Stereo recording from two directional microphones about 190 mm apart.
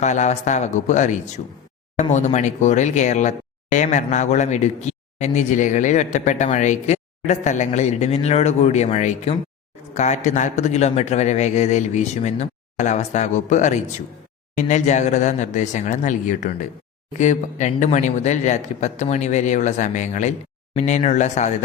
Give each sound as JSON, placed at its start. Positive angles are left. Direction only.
{"t": 0.0, "sound": "speech", "side_deg": 40}